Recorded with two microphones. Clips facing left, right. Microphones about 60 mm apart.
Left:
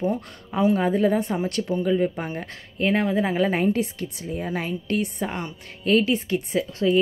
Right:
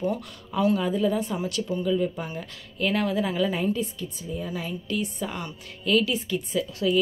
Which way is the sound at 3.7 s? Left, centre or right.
Left.